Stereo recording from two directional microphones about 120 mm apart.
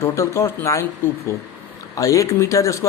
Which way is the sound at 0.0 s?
25° left (ahead or behind).